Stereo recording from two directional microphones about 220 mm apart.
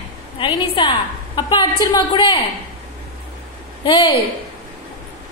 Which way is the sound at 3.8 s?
20° left (ahead or behind).